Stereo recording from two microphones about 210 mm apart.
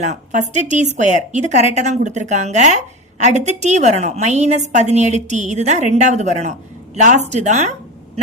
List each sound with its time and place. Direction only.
0.0 s a woman's voice: 35° right (ahead or behind)